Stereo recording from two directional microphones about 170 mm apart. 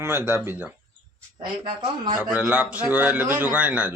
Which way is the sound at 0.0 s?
15° right (ahead or behind).